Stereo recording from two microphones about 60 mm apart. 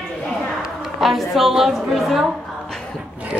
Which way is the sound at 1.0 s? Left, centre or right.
Centre.